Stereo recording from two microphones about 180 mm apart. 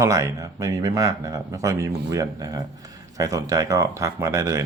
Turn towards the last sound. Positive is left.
turn(degrees=-15)  # may be behind; listen again after turning